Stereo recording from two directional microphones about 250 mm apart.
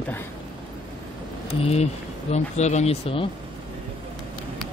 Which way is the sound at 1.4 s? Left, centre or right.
Left.